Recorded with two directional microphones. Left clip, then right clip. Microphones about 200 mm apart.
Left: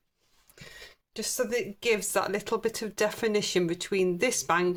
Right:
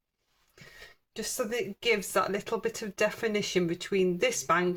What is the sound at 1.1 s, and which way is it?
Speech, 30° left (ahead or behind).